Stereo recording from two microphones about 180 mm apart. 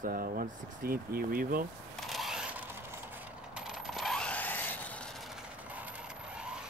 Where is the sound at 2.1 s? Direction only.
Centre (ahead or behind).